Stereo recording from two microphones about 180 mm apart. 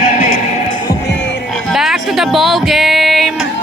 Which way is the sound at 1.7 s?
Centre (ahead or behind).